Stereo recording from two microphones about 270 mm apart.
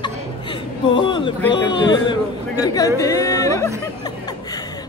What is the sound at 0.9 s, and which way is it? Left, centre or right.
A man's voice, centre.